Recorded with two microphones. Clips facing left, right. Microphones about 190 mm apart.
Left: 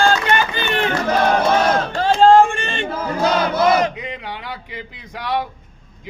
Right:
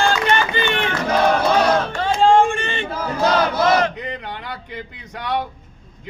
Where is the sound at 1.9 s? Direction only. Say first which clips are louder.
Left 3 dB; 35° left (ahead or behind).